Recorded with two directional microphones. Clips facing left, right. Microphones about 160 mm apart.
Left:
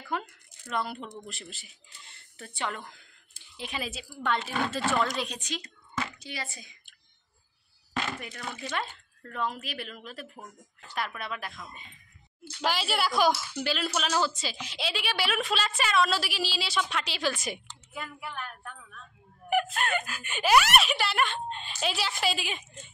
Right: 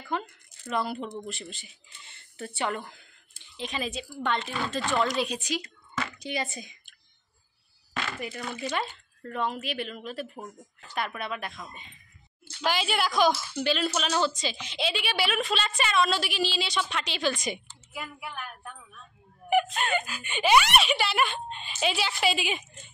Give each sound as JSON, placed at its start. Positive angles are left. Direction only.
{"t": 0.1, "sound": "speech", "side_deg": 5}
{"t": 3.5, "sound": "speech", "side_deg": 10}
{"t": 6.1, "sound": "speech", "side_deg": -20}
{"t": 8.7, "sound": "speech", "side_deg": -5}
{"t": 17.9, "sound": "a woman's voice", "side_deg": -10}
{"t": 19.5, "sound": "speech", "side_deg": 0}